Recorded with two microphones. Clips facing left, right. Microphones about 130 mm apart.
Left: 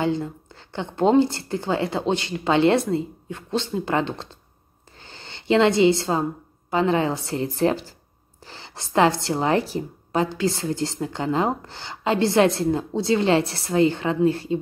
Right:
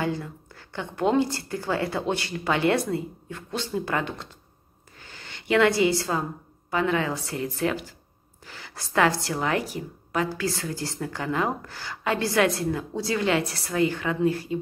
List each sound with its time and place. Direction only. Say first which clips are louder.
0.0 s a woman's voice: left 5 dB; 25° left (ahead or behind)
4.9 s a sound: left 2 dB; 30° left (ahead or behind)
6.7 s a woman's voice: left 4 dB; 25° left (ahead or behind)